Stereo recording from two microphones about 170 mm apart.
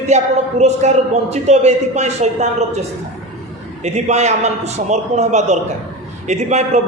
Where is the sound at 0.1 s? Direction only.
40° right (ahead or behind).